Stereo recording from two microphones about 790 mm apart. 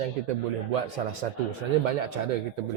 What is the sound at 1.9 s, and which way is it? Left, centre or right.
Speech, right.